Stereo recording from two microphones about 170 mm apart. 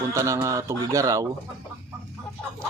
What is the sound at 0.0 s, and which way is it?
Speech, 20° right (ahead or behind).